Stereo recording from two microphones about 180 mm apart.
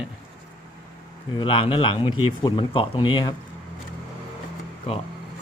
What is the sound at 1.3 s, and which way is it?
Speech, 30° left (ahead or behind).